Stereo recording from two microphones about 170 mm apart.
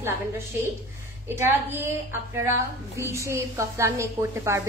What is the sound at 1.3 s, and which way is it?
Speech, 15° right (ahead or behind).